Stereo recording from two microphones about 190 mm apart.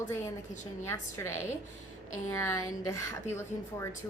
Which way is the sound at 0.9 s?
15° left (ahead or behind).